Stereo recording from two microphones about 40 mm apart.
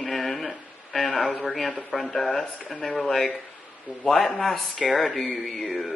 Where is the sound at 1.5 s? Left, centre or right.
Centre.